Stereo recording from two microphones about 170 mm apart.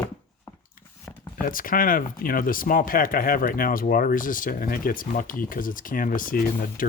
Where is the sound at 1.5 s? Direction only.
55° left (ahead or behind).